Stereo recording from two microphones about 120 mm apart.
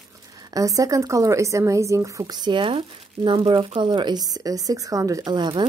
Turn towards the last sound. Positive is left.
turn(degrees=-35)  # may be behind; listen again after turning